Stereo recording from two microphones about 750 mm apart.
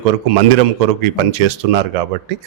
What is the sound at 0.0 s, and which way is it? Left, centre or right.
A man's voice, right.